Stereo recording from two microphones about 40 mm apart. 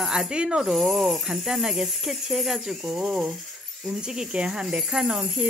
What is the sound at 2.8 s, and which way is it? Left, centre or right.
Cricket, right.